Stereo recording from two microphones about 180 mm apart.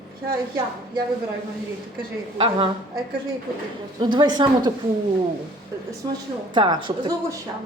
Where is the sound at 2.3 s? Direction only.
30° right (ahead or behind).